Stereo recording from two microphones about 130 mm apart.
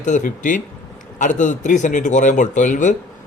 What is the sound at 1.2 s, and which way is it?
Speech, 75° left (ahead or behind).